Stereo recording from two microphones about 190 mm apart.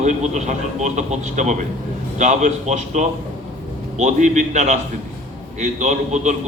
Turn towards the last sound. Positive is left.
turn(degrees=-40)  # may be behind; listen again after turning